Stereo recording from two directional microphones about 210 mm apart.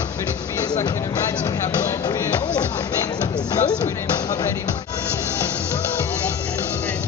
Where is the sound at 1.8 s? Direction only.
15° left (ahead or behind).